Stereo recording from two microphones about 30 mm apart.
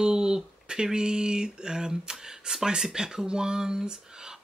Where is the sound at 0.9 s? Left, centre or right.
Right.